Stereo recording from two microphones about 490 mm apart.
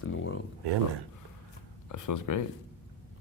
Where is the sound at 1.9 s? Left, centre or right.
Left.